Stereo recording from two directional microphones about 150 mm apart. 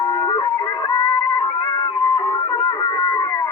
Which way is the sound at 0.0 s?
30° left (ahead or behind).